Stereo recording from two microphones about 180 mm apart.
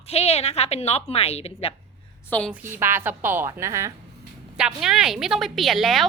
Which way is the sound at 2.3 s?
5° left (ahead or behind).